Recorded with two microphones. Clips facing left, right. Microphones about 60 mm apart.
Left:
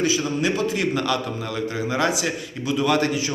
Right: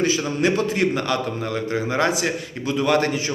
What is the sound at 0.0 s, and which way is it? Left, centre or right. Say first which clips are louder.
Speech: right 2 dB; right.